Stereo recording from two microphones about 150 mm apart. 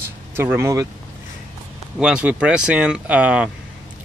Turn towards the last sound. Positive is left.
turn(degrees=-10)  # may be behind; listen again after turning